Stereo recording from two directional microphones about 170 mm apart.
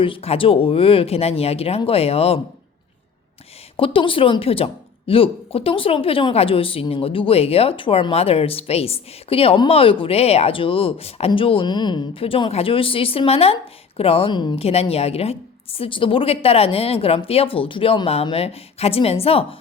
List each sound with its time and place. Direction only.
0.0 s a woman's voice: 35° left (ahead or behind)
3.8 s a woman's voice: 30° left (ahead or behind)